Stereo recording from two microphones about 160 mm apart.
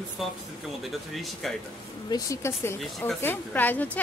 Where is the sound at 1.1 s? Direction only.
Centre (ahead or behind).